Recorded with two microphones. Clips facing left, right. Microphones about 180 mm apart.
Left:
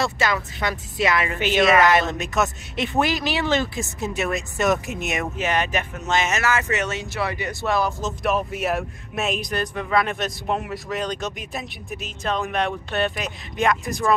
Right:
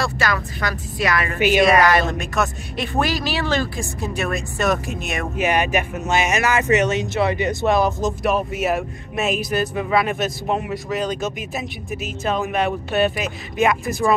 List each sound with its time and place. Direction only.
0.0 s speech: 20° left (ahead or behind)
1.4 s speech: 10° right (ahead or behind)
1.8 s speech: 20° left (ahead or behind)
5.4 s speech: 10° right (ahead or behind)
8.2 s speech: centre (ahead or behind)